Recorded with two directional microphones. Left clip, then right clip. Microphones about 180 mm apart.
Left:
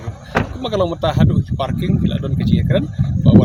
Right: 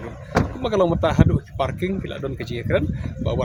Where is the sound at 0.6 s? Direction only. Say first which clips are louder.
Even; 5° right (ahead or behind).